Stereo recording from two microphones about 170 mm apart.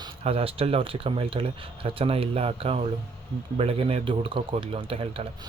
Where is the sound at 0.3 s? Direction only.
35° right (ahead or behind).